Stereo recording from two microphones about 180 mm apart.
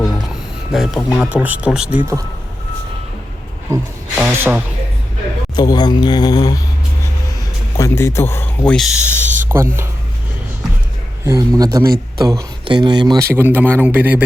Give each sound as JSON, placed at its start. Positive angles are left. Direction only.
{"t": 0.7, "sound": "speech", "side_deg": 0}
{"t": 4.1, "sound": "speech", "side_deg": -10}
{"t": 5.5, "sound": "speech", "side_deg": 20}
{"t": 7.8, "sound": "a man's voice", "side_deg": 15}
{"t": 9.2, "sound": "a sound", "side_deg": -45}
{"t": 9.5, "sound": "speech", "side_deg": -15}
{"t": 11.3, "sound": "a man's voice", "side_deg": -20}